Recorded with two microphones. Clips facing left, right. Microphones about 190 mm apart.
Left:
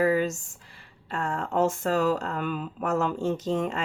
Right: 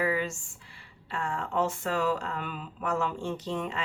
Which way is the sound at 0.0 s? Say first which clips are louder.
Left 6 dB; 40° left (ahead or behind).